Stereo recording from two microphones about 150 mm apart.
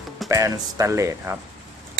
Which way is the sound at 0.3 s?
20° right (ahead or behind).